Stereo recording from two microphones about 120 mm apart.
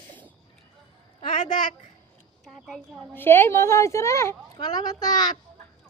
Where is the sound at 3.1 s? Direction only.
20° left (ahead or behind).